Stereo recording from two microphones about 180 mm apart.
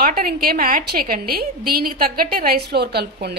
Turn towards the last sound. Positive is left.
turn(degrees=-65)  # may be behind; listen again after turning